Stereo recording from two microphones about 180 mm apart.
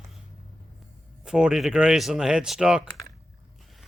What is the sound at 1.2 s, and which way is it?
Speech, 5° right (ahead or behind).